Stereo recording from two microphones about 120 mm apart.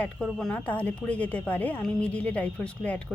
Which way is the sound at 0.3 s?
Centre (ahead or behind).